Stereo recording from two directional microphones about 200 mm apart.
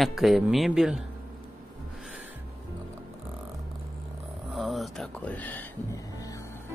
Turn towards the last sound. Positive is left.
turn(degrees=15)  # may be behind; listen again after turning